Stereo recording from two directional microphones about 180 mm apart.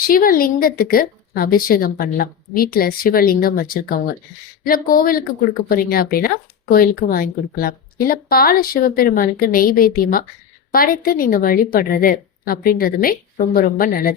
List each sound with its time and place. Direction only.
0.0 s speech: 50° left (ahead or behind)